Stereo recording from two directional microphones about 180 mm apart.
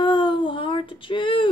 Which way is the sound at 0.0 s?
25° left (ahead or behind).